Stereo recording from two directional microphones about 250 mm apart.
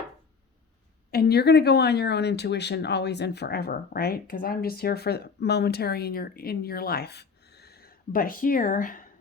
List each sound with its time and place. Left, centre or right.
1.1 s speech: left